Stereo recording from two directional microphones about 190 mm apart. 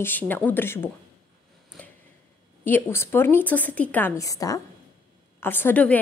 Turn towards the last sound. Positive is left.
turn(degrees=10)  # may be behind; listen again after turning